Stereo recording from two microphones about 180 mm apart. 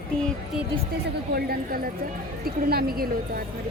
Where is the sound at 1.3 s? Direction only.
60° right (ahead or behind).